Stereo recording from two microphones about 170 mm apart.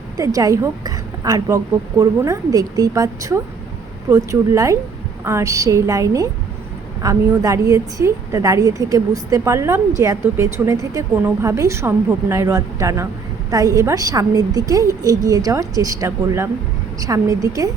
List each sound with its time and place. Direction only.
0.2 s a woman's voice: 20° right (ahead or behind)